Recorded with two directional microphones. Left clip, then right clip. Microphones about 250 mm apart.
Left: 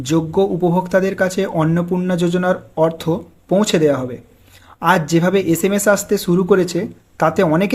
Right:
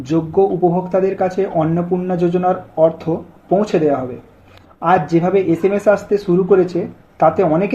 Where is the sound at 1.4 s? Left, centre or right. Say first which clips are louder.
Right 1 dB; left.